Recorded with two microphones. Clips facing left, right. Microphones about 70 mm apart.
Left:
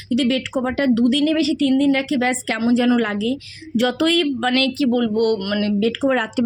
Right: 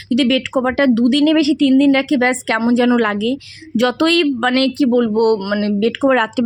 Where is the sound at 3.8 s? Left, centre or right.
Right.